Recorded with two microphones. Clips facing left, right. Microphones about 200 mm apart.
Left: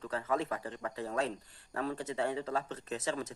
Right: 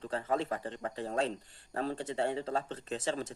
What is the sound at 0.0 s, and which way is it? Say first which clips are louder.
Speech: right 1 dB; 30° right (ahead or behind).